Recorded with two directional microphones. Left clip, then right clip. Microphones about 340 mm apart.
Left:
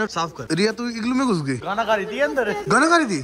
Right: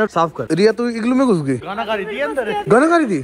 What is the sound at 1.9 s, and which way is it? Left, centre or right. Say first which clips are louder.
Speech: even; left.